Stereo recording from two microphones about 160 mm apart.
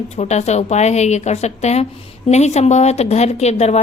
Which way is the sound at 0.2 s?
45° left (ahead or behind).